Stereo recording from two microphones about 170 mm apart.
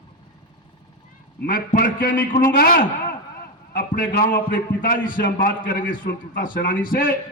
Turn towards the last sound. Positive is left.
turn(degrees=55)  # may be behind; listen again after turning